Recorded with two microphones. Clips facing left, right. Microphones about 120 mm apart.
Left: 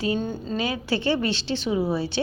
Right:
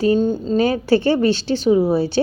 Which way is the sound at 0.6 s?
45° right (ahead or behind).